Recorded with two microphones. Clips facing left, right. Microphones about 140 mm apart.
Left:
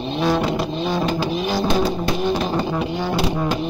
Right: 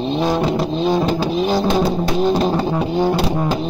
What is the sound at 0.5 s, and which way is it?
Music, 35° right (ahead or behind).